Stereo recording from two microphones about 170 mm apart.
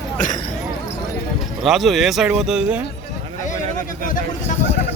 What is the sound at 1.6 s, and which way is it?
Speech, centre (ahead or behind).